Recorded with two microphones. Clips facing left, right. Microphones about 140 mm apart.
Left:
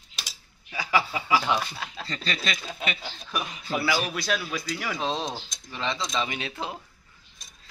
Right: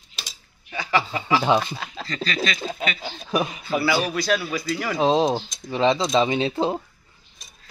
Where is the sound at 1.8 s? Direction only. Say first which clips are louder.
Right 3 dB; centre (ahead or behind).